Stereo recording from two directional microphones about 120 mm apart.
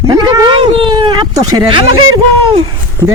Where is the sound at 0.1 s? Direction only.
35° right (ahead or behind).